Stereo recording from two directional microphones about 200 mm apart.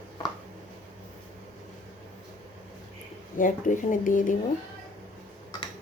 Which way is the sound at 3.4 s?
40° left (ahead or behind).